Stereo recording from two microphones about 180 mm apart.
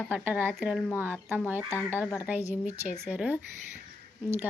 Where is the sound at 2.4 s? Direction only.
40° left (ahead or behind).